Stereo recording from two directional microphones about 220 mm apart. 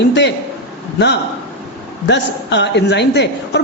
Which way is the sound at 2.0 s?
50° left (ahead or behind).